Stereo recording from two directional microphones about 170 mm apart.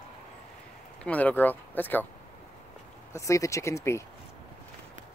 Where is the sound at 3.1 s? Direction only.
20° left (ahead or behind).